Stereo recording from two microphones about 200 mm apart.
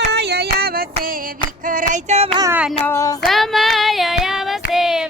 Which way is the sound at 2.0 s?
30° right (ahead or behind).